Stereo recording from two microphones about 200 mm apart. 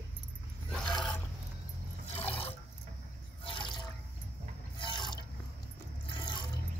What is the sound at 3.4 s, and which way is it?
Water, 25° left (ahead or behind).